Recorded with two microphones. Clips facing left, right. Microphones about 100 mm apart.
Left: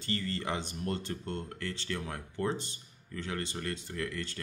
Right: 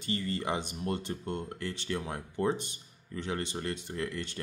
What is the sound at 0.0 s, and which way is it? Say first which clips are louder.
Speech: right 2 dB; 15° right (ahead or behind).